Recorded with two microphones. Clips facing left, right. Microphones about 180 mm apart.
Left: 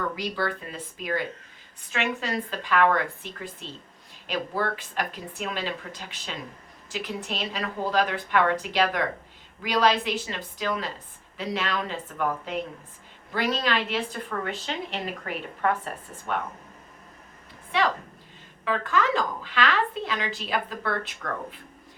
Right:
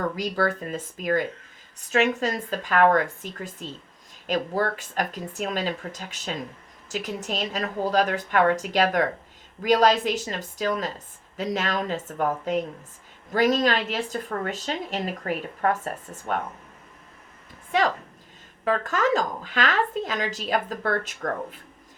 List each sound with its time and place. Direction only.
0.2 s a woman's voice: 45° right (ahead or behind)
18.6 s a woman's voice: 40° right (ahead or behind)